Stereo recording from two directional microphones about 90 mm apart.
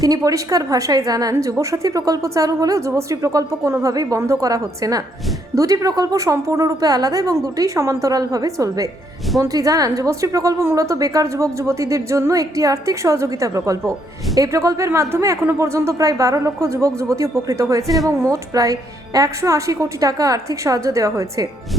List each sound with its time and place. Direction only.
0.0 s a woman's voice: 40° right (ahead or behind)